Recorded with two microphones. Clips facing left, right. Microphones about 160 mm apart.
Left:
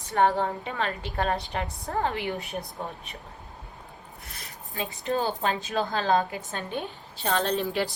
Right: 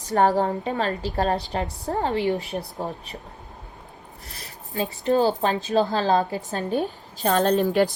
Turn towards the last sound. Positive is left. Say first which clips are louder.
# right 7 dB
turn(degrees=-45)  # may be behind; listen again after turning